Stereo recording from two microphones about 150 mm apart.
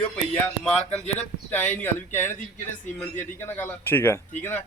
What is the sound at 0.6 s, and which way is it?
Speech, 5° left (ahead or behind).